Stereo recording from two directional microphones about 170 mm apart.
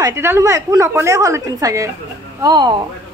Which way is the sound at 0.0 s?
15° right (ahead or behind).